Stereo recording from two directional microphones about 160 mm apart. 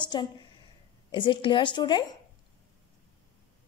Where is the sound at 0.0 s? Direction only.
30° left (ahead or behind).